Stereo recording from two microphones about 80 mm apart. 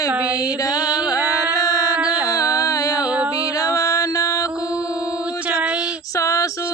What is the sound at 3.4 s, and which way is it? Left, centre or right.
Mantra, left.